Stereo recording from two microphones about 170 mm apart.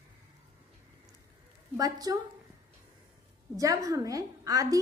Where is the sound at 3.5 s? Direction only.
20° right (ahead or behind).